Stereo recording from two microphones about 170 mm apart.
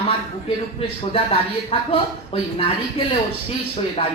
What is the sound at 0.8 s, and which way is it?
Speech, 35° left (ahead or behind).